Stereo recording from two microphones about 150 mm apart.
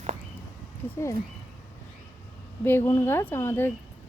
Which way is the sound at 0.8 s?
15° left (ahead or behind).